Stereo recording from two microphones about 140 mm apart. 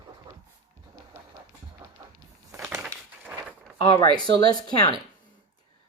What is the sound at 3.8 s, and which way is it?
Speech, 40° left (ahead or behind).